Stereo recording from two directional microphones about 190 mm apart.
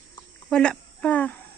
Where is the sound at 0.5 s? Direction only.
5° left (ahead or behind).